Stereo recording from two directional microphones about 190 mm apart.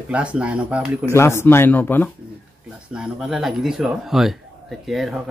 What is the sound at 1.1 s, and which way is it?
Speech, 15° left (ahead or behind).